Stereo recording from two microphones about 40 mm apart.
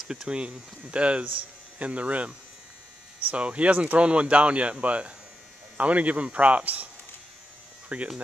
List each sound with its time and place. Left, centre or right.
0.1 s speech: centre
0.4 s speech: right
7.9 s speech: right